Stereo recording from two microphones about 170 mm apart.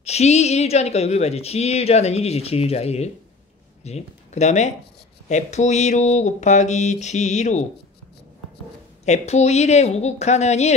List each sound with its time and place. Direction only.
0.0 s speech: 40° left (ahead or behind)
9.0 s speech: 40° left (ahead or behind)